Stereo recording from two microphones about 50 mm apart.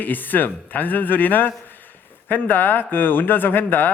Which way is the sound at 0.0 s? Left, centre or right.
Left.